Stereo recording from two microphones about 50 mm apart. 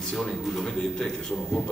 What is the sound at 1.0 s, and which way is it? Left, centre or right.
Speech, centre.